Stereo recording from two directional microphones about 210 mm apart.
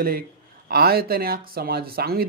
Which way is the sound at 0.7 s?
45° right (ahead or behind).